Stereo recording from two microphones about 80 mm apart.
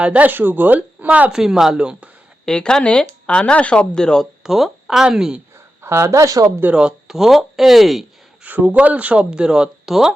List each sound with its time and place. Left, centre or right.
0.0 s speech: centre
1.3 s speech: centre
2.5 s speech: centre
4.4 s speech: centre
5.8 s speech: right
6.6 s speech: centre
8.4 s speech: centre